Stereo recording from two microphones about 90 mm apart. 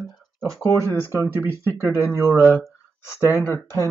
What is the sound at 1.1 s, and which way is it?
Speech, 30° left (ahead or behind).